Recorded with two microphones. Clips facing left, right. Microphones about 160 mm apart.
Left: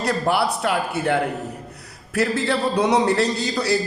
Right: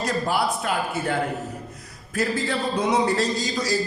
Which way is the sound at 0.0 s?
65° left (ahead or behind).